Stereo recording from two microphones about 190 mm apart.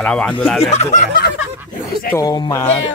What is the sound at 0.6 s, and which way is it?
Speech, 35° left (ahead or behind).